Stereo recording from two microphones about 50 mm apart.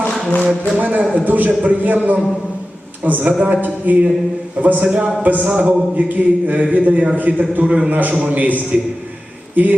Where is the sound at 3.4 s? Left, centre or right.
Right.